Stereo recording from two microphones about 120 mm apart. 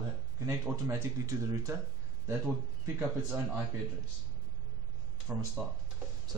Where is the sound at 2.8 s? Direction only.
20° right (ahead or behind).